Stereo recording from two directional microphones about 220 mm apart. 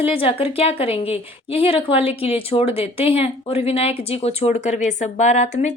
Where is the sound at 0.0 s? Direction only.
25° left (ahead or behind).